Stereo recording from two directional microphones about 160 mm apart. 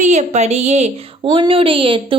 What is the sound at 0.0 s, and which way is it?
A woman's voice, 45° right (ahead or behind).